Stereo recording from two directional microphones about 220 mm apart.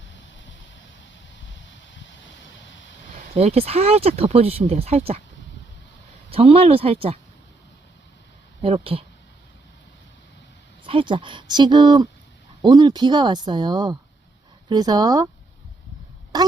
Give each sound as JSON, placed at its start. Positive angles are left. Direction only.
{"t": 1.7, "sound": "a sound", "side_deg": 55}
{"t": 3.3, "sound": "speech", "side_deg": -25}
{"t": 6.3, "sound": "speech", "side_deg": -25}
{"t": 8.6, "sound": "speech", "side_deg": -25}
{"t": 10.8, "sound": "speech", "side_deg": -20}
{"t": 16.3, "sound": "a sound", "side_deg": -20}